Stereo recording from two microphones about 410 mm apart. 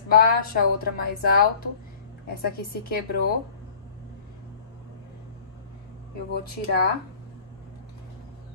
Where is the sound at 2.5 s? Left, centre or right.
Left.